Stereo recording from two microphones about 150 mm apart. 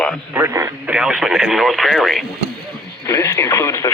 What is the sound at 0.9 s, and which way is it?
Speech, 5° right (ahead or behind).